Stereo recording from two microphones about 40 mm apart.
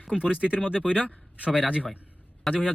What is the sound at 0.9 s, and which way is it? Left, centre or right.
Speech, left.